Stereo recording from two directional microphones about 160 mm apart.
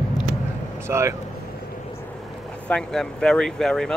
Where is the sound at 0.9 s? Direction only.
15° right (ahead or behind).